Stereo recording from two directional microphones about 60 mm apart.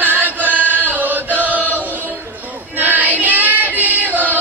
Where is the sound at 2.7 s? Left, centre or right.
Right.